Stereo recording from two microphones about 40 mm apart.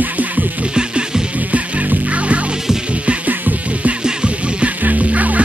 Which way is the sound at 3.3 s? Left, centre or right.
Right.